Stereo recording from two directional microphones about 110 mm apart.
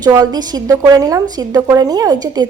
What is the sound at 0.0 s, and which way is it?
A woman's voice, 35° right (ahead or behind).